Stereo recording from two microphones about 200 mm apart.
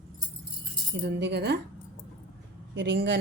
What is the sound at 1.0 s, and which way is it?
Speech, 55° right (ahead or behind).